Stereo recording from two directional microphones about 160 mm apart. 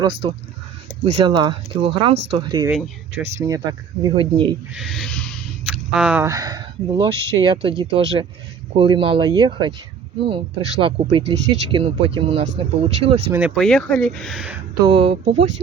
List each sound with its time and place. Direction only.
0.2 s speech: 30° right (ahead or behind)
2.1 s speech: 90° right
2.4 s speech: 30° right (ahead or behind)
2.6 s speech: 5° right (ahead or behind)
3.3 s speech: 20° right (ahead or behind)
4.7 s speech: centre (ahead or behind)
5.7 s a sound: 5° right (ahead or behind)
6.2 s speech: 25° right (ahead or behind)
13.6 s speech: 5° left (ahead or behind)
14.8 s speech: 35° right (ahead or behind)